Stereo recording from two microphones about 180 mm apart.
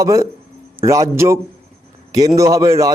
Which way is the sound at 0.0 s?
20° right (ahead or behind).